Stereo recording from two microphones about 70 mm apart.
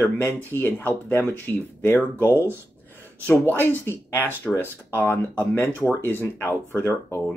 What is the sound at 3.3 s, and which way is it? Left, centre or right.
Speech, left.